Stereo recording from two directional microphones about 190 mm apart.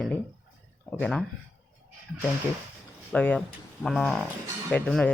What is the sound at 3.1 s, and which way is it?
Speech, 5° left (ahead or behind).